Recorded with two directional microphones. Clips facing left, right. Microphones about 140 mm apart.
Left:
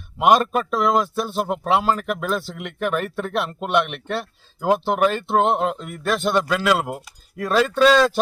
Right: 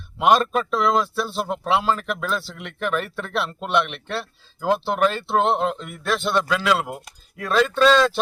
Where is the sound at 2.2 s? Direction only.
45° left (ahead or behind).